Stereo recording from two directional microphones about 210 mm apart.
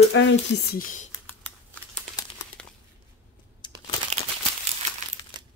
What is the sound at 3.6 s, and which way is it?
Crumpling, 20° left (ahead or behind).